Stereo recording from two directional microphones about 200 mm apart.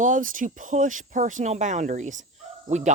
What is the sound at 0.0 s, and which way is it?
Speech, 40° right (ahead or behind).